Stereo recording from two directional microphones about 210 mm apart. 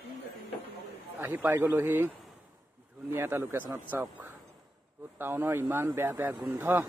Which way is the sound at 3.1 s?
10° right (ahead or behind).